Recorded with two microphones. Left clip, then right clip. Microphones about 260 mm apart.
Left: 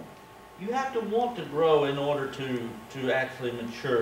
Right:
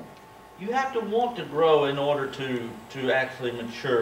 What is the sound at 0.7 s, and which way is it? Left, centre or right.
Speech, centre.